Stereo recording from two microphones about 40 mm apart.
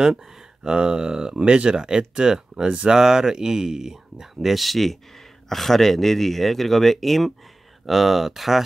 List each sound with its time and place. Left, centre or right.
0.0 s speech: centre